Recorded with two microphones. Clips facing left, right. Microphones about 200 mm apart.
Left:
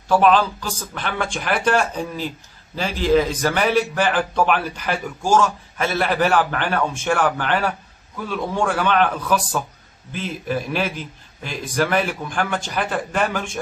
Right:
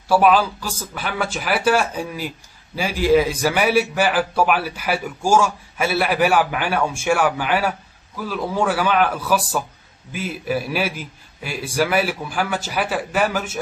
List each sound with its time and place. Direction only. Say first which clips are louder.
0.1 s a man's voice: even; 10° right (ahead or behind)